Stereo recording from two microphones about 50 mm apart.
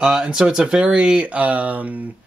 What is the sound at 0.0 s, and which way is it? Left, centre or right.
Speech, centre.